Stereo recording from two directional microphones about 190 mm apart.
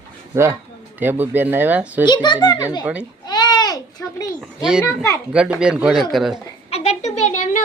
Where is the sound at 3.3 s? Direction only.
20° left (ahead or behind).